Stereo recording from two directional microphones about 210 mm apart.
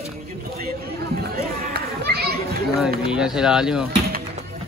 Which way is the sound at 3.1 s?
5° right (ahead or behind).